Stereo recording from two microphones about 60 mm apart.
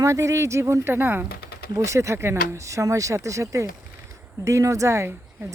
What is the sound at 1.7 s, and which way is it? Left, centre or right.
Speech, right.